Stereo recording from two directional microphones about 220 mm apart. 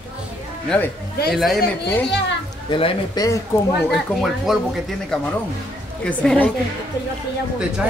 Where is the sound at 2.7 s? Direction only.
20° left (ahead or behind).